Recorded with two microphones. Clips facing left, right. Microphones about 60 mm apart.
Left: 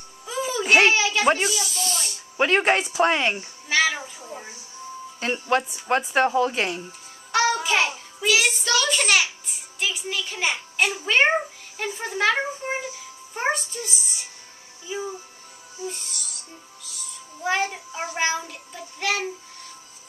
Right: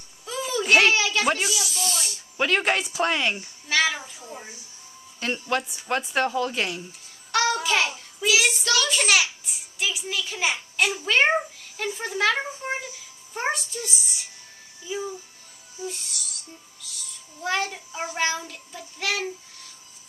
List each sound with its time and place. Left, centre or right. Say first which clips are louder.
0.2 s babbling: left 1 dB; centre
1.5 s snake: left 1 dB; centre
2.3 s speech: left 3 dB; left
3.7 s music: left 1 dB; centre
5.2 s child singing: left 3 dB; centre
8.3 s child singing: left 1 dB; centre
11.1 s a child's voice: left 1 dB; centre
12.8 s music: left 5 dB; centre
15.9 s music: left 1 dB; centre
17.4 s child singing: left 2 dB; centre